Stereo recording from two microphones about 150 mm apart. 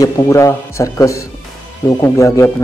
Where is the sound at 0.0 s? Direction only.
20° left (ahead or behind).